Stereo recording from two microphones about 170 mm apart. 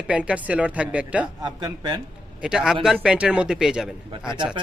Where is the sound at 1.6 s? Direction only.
25° right (ahead or behind).